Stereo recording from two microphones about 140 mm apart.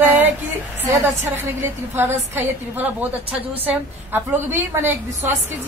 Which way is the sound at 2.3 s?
15° right (ahead or behind).